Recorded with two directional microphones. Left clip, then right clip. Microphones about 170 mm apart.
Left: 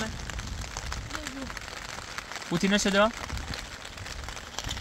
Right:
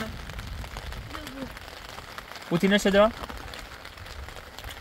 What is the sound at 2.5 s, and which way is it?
Speech, 55° right (ahead or behind).